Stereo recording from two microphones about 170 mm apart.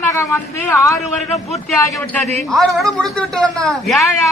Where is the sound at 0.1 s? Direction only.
15° left (ahead or behind).